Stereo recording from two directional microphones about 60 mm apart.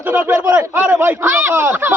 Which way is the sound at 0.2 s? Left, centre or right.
Right.